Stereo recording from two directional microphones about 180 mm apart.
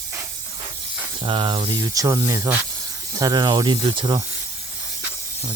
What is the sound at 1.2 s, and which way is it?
Speech, 30° right (ahead or behind).